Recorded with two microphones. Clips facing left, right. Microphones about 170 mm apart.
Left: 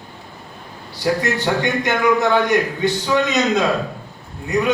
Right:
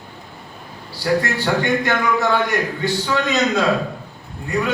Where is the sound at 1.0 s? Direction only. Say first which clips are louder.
Even; 20° left (ahead or behind).